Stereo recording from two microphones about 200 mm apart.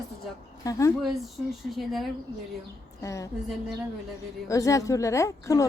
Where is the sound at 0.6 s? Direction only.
15° left (ahead or behind).